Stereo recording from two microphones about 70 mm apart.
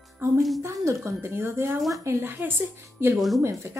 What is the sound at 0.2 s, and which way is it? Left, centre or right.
A woman's voice, right.